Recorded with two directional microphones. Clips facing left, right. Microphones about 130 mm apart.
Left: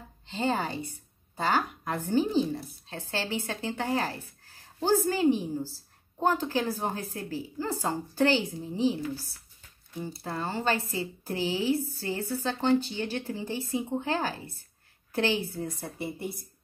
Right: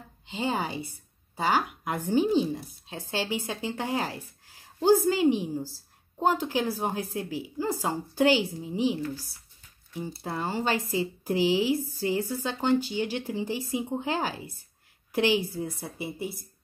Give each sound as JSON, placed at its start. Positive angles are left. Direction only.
{"t": 0.3, "sound": "speech", "side_deg": -10}
{"t": 10.2, "sound": "speech", "side_deg": -15}